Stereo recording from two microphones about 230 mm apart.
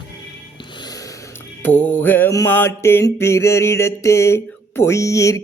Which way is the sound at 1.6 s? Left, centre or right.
Centre.